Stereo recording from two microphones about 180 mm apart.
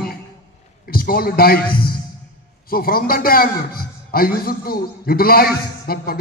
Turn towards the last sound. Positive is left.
turn(degrees=55)  # may be behind; listen again after turning